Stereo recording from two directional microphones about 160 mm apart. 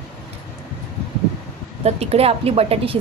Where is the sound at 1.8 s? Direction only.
40° right (ahead or behind).